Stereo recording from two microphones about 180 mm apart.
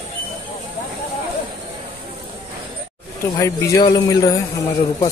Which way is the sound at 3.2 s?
15° left (ahead or behind).